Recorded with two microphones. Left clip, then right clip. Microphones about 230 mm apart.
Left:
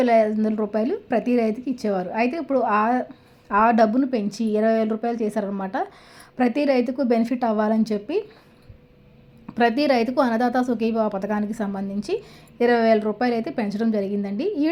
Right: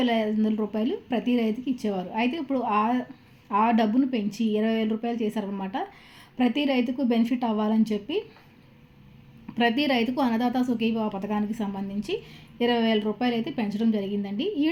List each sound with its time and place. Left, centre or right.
0.0 s a woman's voice: centre
9.6 s a woman's voice: centre